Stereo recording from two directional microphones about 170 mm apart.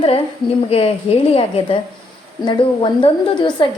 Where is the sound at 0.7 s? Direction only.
35° left (ahead or behind).